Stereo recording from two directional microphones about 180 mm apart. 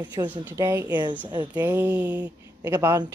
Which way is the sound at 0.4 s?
15° right (ahead or behind).